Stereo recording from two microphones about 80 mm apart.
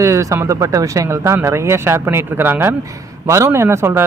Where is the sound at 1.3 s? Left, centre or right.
Right.